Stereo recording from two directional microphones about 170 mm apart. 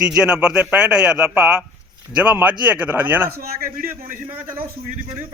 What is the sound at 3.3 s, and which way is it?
Speech, 60° right (ahead or behind).